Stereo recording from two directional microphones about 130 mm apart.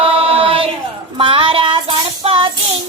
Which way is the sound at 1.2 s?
40° right (ahead or behind).